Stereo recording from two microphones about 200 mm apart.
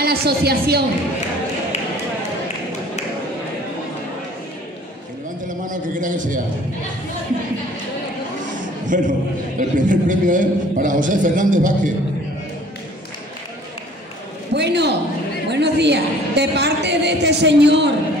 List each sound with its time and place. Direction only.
0.0 s a woman's voice: 50° right (ahead or behind)
5.7 s a man's voice: 40° right (ahead or behind)
8.8 s a man's voice: 40° right (ahead or behind)
14.5 s a man's voice: 60° right (ahead or behind)